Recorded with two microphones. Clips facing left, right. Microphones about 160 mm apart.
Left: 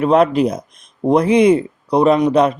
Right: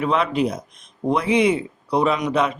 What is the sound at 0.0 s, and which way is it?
Speech, 45° left (ahead or behind).